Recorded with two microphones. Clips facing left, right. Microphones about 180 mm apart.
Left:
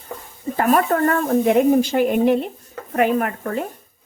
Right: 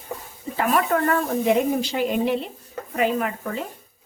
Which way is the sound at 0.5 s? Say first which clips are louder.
Left 4 dB; 45° left (ahead or behind).